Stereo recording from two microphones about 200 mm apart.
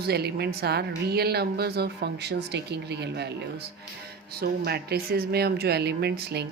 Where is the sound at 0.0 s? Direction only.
55° right (ahead or behind).